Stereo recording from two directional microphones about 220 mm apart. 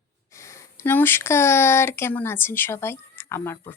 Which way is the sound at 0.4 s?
10° left (ahead or behind).